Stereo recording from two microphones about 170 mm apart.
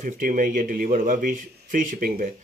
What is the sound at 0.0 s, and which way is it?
Speech, 50° right (ahead or behind).